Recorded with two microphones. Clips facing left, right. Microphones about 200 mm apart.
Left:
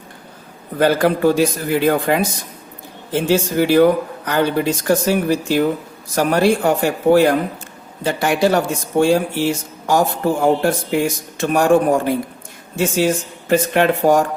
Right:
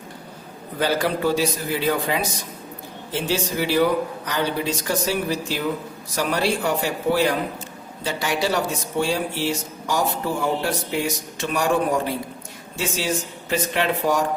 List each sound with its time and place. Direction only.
0.8 s speech: 55° left (ahead or behind)